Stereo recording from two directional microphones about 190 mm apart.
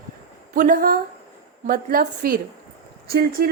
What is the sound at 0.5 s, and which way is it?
A woman's voice, 45° right (ahead or behind).